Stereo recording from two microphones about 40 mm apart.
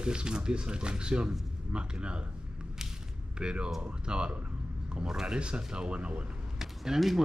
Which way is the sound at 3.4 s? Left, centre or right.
Right.